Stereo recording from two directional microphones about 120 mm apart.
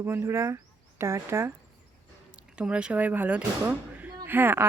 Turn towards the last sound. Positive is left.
turn(degrees=-15)  # may be behind; listen again after turning